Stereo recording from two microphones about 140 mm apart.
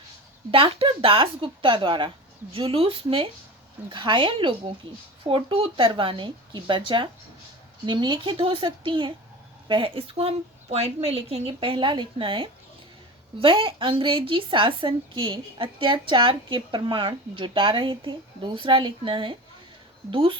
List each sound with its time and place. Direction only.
0.5 s a woman's voice: 40° right (ahead or behind)